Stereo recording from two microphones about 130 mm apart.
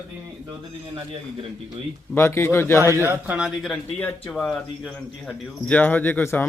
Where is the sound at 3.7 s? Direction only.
10° left (ahead or behind).